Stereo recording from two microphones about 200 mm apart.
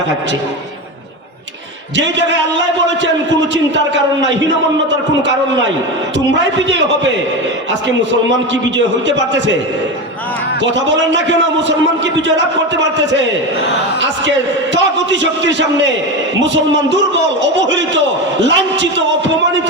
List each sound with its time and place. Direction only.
3.5 s a man's voice: 65° right (ahead or behind)
6.7 s a man's voice: 65° right (ahead or behind)
9.0 s a man's voice: 65° right (ahead or behind)
10.6 s a man's voice: 65° right (ahead or behind)
14.0 s a man's voice: 65° right (ahead or behind)